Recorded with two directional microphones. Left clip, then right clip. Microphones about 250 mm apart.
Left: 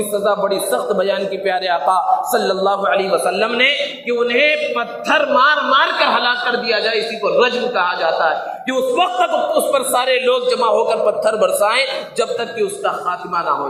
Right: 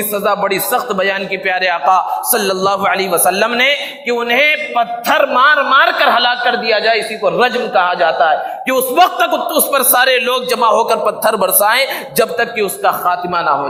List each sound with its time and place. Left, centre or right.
0.3 s a man's voice: right